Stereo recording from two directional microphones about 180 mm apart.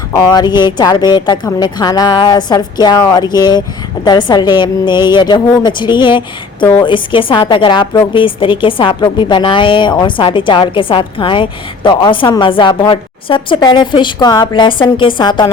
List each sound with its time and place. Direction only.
0.1 s a woman's voice: 25° left (ahead or behind)